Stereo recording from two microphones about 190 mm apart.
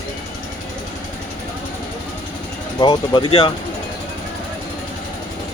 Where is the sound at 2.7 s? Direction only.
20° left (ahead or behind).